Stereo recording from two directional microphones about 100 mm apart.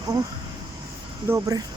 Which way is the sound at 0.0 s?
40° right (ahead or behind).